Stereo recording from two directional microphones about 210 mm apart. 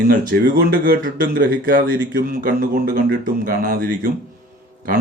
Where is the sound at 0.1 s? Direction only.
40° right (ahead or behind).